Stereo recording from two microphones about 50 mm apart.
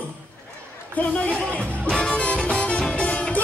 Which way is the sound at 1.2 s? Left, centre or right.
Left.